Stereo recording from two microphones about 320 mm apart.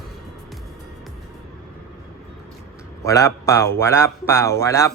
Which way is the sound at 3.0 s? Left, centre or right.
Centre.